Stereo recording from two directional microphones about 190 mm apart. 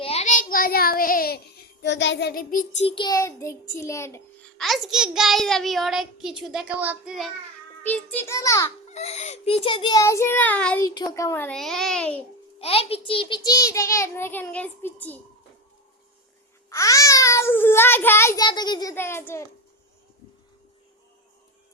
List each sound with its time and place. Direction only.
0.0 s child singing: 35° left (ahead or behind)
2.8 s a child's voice: 25° left (ahead or behind)
4.5 s a child's voice: centre (ahead or behind)
7.9 s a child's voice: 10° left (ahead or behind)
8.9 s a child's voice: 35° left (ahead or behind); by 10.8 s 10° left (ahead or behind)
10.8 s a child's voice: 20° left (ahead or behind)
12.5 s a child's voice: 30° left (ahead or behind); by 15.2 s 10° left (ahead or behind)
16.6 s a child's voice: 15° left (ahead or behind)